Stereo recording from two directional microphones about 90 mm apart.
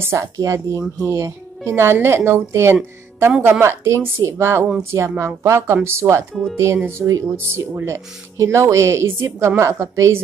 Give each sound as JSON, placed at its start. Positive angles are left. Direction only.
{"t": 0.0, "sound": "speech", "side_deg": -35}